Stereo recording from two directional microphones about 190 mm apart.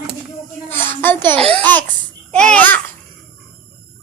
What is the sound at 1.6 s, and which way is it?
Laughter, 10° left (ahead or behind).